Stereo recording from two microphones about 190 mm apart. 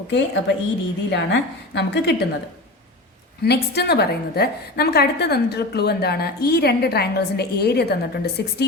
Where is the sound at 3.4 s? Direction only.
60° left (ahead or behind).